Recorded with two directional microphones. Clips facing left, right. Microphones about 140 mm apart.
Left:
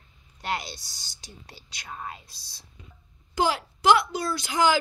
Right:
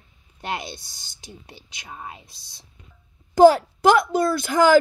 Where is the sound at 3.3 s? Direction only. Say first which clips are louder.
Right 13 dB; 45° right (ahead or behind).